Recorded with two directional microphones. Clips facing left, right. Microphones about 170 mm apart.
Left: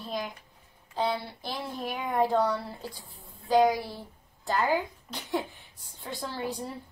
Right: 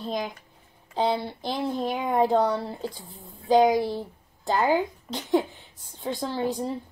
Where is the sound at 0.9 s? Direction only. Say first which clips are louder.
Right 4 dB; 25° right (ahead or behind).